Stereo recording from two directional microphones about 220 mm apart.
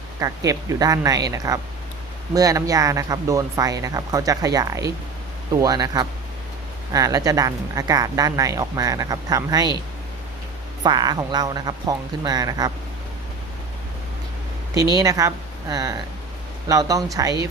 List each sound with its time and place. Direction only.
0.2 s speech: 15° right (ahead or behind)
10.8 s speech: 20° right (ahead or behind)
14.8 s speech: 15° right (ahead or behind)